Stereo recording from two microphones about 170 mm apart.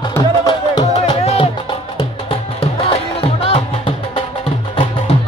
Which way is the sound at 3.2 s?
35° left (ahead or behind).